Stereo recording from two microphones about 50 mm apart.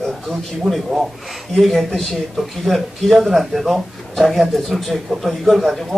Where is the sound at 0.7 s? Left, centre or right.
Centre.